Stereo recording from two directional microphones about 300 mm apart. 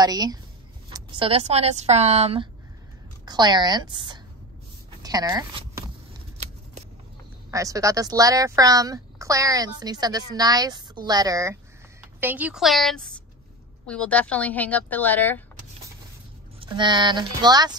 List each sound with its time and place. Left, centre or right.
0.0 s a woman's voice: centre
5.0 s a sound: centre
7.5 s a woman's voice: centre
16.5 s a woman's voice: centre